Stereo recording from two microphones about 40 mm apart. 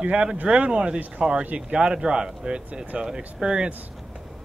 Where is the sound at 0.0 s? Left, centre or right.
Right.